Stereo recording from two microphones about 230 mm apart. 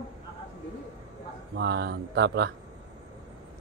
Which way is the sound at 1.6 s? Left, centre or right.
Right.